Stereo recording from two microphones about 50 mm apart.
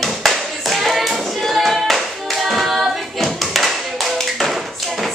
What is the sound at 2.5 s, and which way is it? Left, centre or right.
Hands, centre.